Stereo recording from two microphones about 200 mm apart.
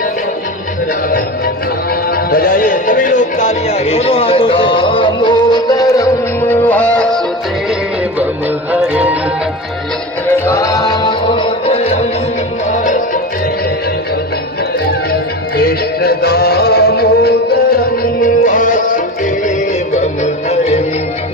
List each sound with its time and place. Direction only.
2.1 s music: 45° left (ahead or behind); by 7.2 s 5° left (ahead or behind)
8.7 s music: 5° right (ahead or behind)
10.2 s music: 15° left (ahead or behind); by 13.2 s 40° left (ahead or behind)
15.5 s music: 50° left (ahead or behind)
18.2 s music: 40° left (ahead or behind)